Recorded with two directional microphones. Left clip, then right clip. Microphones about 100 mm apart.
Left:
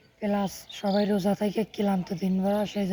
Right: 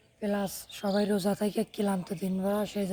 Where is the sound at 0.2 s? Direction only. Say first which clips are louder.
Left 3 dB; 25° right (ahead or behind).